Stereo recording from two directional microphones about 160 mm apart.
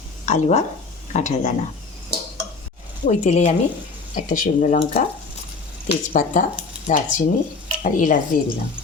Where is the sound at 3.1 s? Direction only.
45° left (ahead or behind).